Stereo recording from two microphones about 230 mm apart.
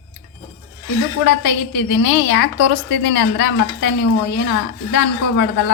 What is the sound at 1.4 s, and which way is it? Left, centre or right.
A woman's voice, left.